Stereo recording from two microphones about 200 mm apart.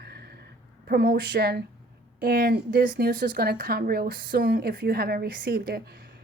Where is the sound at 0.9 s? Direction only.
50° right (ahead or behind).